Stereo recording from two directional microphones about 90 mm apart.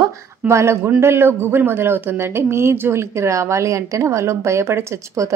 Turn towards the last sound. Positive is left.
turn(degrees=-35)  # may be behind; listen again after turning